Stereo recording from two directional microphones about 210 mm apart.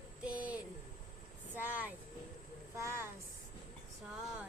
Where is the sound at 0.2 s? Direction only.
5° right (ahead or behind).